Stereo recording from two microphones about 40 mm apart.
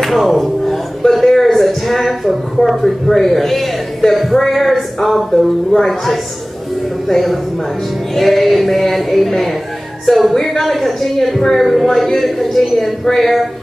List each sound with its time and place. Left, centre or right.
0.0 s speech: centre
10.3 s a man's voice: centre
10.6 s speech: centre